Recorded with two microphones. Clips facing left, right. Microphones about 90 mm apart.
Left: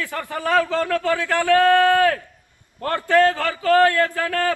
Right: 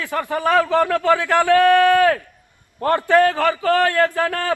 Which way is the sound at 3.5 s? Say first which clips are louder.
Left 1 dB; 25° right (ahead or behind).